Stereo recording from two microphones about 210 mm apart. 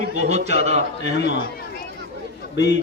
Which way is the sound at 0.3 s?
30° right (ahead or behind).